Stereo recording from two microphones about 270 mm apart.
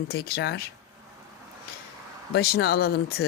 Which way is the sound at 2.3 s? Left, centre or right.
Left.